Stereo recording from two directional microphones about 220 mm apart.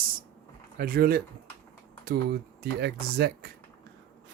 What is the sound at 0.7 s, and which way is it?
Speech, 40° right (ahead or behind).